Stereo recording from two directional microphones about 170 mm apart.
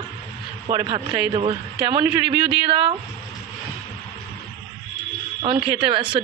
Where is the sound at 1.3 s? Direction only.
30° right (ahead or behind).